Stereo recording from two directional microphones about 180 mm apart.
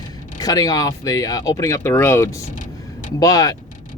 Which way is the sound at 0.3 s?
20° left (ahead or behind).